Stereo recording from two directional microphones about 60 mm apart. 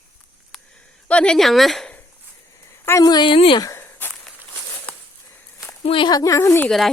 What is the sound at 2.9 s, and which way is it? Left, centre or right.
Speech, left.